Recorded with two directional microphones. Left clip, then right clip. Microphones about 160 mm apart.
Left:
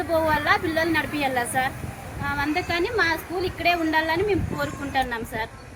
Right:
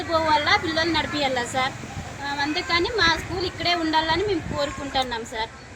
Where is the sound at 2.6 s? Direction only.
50° left (ahead or behind).